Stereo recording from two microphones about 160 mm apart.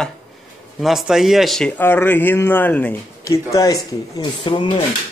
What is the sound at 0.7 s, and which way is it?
Speech, centre (ahead or behind).